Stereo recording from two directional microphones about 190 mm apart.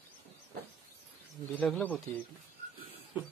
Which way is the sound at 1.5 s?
10° left (ahead or behind).